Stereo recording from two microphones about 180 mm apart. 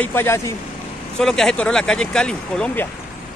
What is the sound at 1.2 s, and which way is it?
Speech, 5° left (ahead or behind).